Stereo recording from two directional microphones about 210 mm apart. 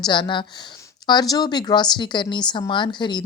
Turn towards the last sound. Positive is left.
turn(degrees=20)  # may be behind; listen again after turning